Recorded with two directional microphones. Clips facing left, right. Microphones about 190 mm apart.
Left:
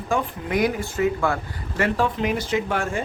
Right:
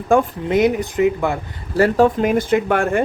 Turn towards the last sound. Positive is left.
turn(degrees=-60)  # may be behind; listen again after turning